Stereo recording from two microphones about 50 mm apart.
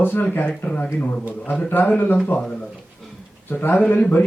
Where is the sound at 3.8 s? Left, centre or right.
Left.